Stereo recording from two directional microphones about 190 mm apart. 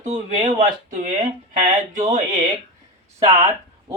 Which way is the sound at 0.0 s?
40° right (ahead or behind).